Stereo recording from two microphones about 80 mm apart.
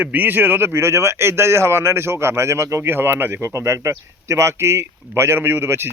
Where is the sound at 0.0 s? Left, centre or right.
Right.